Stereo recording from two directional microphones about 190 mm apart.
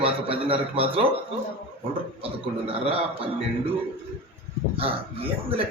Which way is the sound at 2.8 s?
30° right (ahead or behind).